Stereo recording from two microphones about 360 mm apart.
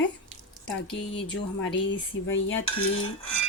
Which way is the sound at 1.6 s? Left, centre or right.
Left.